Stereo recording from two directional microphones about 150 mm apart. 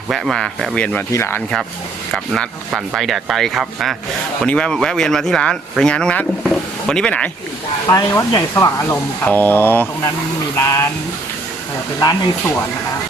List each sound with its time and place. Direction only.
0.1 s speech: 5° left (ahead or behind)
1.1 s speech: 15° left (ahead or behind)
2.1 s speech: 5° left (ahead or behind)
7.9 s speech: 20° left (ahead or behind)
11.9 s speech: 25° left (ahead or behind)